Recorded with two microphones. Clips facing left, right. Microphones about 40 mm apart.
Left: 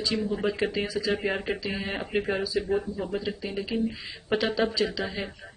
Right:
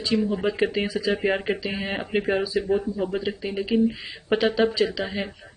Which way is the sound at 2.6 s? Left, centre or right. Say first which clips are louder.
Right 3 dB; centre.